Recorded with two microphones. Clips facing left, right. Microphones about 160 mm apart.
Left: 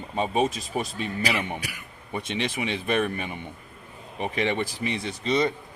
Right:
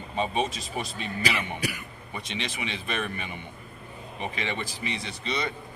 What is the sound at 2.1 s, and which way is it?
Speech, 50° left (ahead or behind).